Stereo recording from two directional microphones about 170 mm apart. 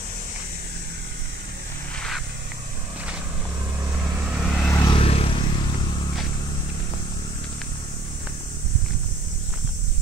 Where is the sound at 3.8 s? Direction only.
5° right (ahead or behind).